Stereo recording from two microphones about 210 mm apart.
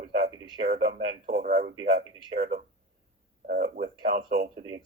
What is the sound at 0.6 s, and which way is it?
Speech, 50° right (ahead or behind).